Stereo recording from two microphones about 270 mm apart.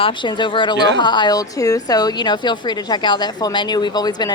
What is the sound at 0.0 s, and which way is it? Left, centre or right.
A woman's voice, centre.